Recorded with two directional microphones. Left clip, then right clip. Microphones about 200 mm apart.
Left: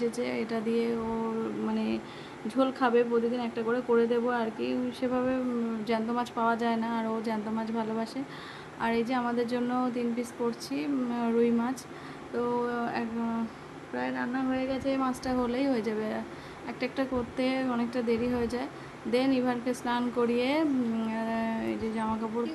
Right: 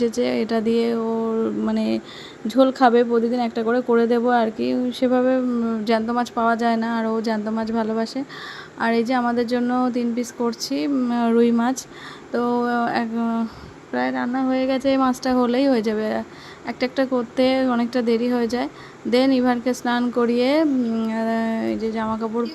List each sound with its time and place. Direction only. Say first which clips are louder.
0.0 s speech: right 10 dB; 35° right (ahead or behind)